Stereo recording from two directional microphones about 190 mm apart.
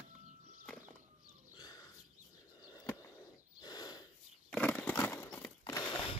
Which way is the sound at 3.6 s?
20° left (ahead or behind).